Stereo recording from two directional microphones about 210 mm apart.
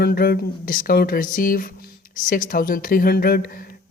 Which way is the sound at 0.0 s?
45° left (ahead or behind).